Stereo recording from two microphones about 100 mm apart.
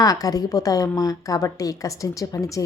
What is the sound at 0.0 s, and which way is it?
A woman's voice, 35° left (ahead or behind).